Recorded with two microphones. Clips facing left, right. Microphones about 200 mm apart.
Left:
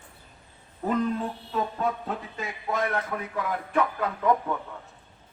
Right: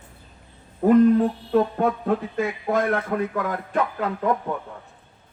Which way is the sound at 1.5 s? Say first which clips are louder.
Right 5 dB; 55° right (ahead or behind).